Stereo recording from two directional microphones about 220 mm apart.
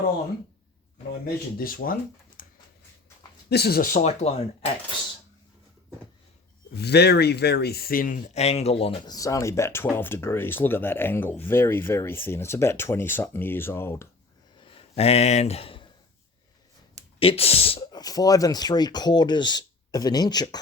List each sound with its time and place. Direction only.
1.2 s speech: 40° left (ahead or behind)
3.5 s speech: 45° left (ahead or behind); by 4.7 s 30° left (ahead or behind)
6.7 s speech: 50° left (ahead or behind); by 14.1 s 10° left (ahead or behind)
14.6 s a sound: 25° left (ahead or behind)
17.2 s speech: 25° left (ahead or behind)